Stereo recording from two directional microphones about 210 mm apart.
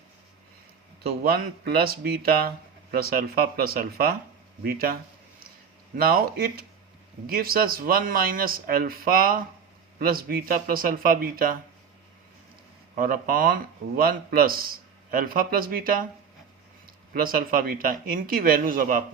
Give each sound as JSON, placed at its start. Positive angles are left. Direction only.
{"t": 1.2, "sound": "speech", "side_deg": -45}
{"t": 6.0, "sound": "speech", "side_deg": -45}
{"t": 13.0, "sound": "speech", "side_deg": -45}
{"t": 17.2, "sound": "speech", "side_deg": -45}